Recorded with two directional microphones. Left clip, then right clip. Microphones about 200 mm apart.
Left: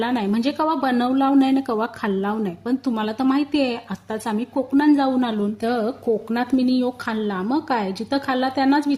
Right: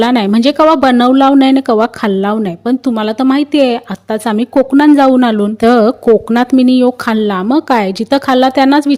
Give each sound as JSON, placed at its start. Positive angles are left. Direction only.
{"t": 0.0, "sound": "speech", "side_deg": -45}